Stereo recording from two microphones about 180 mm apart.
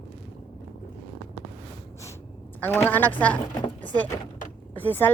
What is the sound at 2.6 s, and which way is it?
Speech, 10° left (ahead or behind).